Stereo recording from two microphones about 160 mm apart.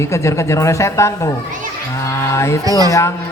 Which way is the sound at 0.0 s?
20° left (ahead or behind).